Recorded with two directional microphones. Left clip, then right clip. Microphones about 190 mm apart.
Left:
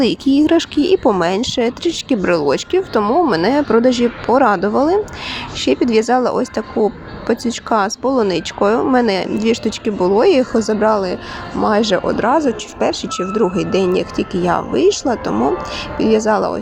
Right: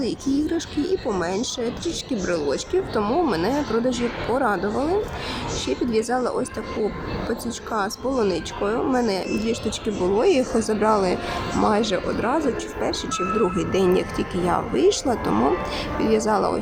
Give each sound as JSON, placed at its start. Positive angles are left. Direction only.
{"t": 0.0, "sound": "speech", "side_deg": 40}